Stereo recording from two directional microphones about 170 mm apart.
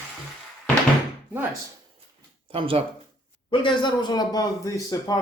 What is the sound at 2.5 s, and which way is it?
Speech, 30° right (ahead or behind).